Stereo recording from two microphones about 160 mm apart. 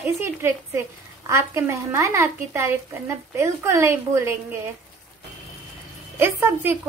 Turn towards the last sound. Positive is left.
turn(degrees=-15)  # may be behind; listen again after turning